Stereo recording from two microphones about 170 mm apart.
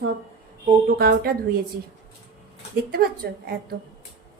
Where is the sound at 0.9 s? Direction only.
65° right (ahead or behind).